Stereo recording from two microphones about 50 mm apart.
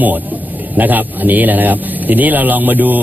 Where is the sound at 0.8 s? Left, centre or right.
Right.